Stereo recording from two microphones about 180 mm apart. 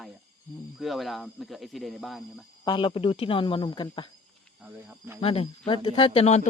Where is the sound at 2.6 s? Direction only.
25° left (ahead or behind).